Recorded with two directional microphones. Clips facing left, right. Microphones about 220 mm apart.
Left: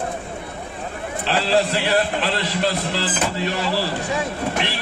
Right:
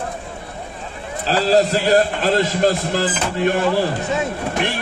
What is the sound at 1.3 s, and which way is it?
A man's voice, 40° right (ahead or behind).